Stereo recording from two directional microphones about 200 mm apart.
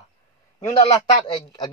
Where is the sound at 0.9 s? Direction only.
25° left (ahead or behind).